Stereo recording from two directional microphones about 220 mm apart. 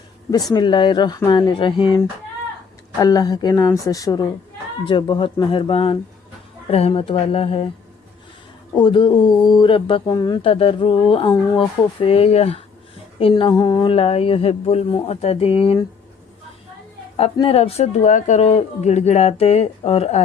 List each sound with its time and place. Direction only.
0.5 s speech: 20° left (ahead or behind)
3.0 s a woman's voice: 15° left (ahead or behind)
8.7 s speech: 20° left (ahead or behind)
17.2 s speech: 25° left (ahead or behind)